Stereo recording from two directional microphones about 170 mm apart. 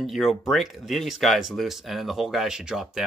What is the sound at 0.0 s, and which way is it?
Speech, centre (ahead or behind).